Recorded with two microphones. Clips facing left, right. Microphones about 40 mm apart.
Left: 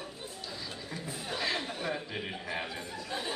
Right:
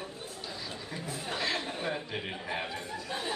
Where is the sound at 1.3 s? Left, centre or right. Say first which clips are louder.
Even; centre.